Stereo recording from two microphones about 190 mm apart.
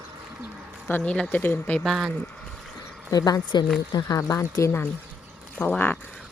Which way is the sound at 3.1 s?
20° left (ahead or behind).